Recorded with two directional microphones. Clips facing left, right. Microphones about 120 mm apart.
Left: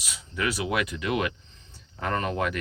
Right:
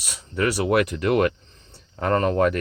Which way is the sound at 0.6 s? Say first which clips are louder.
Right 8 dB; 50° right (ahead or behind).